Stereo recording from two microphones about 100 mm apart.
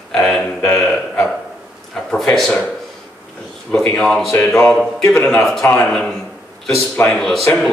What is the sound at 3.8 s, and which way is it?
Speech, 5° left (ahead or behind).